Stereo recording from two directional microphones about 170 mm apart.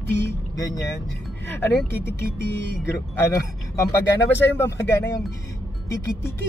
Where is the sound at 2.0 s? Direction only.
75° left (ahead or behind).